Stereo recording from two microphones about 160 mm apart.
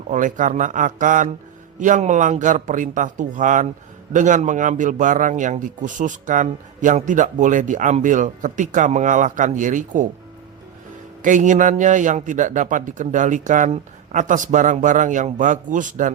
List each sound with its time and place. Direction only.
0.1 s a man's voice: 50° right (ahead or behind)
11.2 s a man's voice: 50° right (ahead or behind)